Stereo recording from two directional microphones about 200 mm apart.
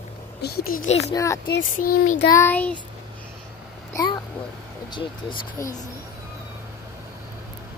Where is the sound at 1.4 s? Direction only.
45° left (ahead or behind).